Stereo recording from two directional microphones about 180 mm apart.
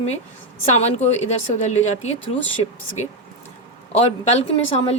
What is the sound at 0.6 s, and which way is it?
Speech, 40° left (ahead or behind).